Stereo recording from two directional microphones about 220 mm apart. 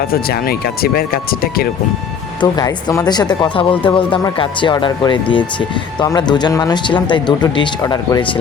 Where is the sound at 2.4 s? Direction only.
15° left (ahead or behind).